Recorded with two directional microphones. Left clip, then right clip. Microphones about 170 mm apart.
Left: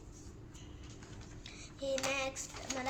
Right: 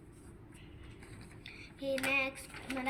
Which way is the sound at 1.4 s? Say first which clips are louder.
Right 1 dB; 30° left (ahead or behind).